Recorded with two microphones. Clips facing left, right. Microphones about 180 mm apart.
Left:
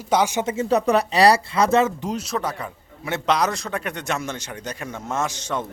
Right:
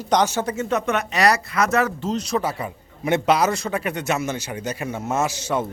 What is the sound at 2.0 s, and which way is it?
Speech, 10° left (ahead or behind).